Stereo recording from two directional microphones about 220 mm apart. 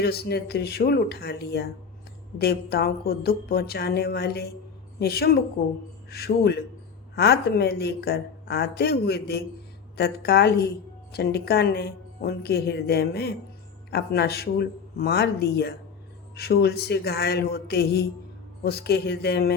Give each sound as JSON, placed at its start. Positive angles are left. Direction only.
{"t": 0.0, "sound": "a woman's voice", "side_deg": 50}